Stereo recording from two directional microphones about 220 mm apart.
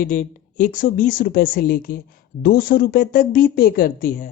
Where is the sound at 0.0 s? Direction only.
40° left (ahead or behind).